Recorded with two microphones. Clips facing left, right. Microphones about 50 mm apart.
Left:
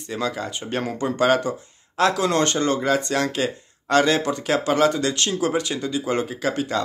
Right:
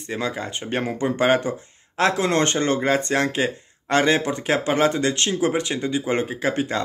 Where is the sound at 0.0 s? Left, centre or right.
Right.